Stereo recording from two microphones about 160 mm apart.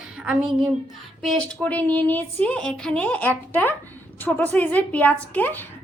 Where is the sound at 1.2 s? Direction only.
5° left (ahead or behind).